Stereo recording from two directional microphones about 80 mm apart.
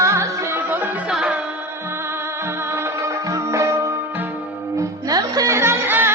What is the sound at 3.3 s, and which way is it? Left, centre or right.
Music, right.